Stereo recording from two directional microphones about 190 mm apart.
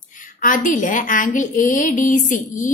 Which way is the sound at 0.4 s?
40° left (ahead or behind).